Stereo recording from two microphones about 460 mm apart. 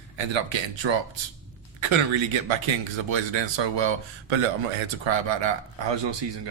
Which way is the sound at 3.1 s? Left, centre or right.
Right.